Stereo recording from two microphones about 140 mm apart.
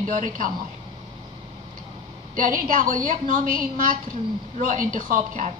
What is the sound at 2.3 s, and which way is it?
A woman's voice, 75° right (ahead or behind).